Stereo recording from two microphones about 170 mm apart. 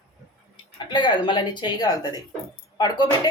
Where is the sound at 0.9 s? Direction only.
25° left (ahead or behind).